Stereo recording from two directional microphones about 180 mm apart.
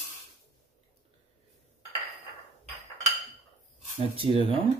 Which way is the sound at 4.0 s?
30° right (ahead or behind).